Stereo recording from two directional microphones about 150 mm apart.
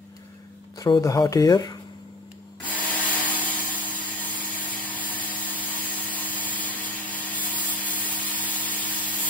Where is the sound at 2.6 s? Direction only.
10° left (ahead or behind).